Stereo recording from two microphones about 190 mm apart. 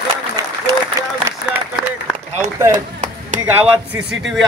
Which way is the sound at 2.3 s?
15° right (ahead or behind).